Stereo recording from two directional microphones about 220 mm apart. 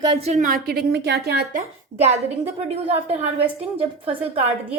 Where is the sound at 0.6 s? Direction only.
45° right (ahead or behind).